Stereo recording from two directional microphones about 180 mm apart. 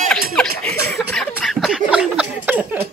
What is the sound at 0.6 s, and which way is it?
Chuckle, 5° left (ahead or behind).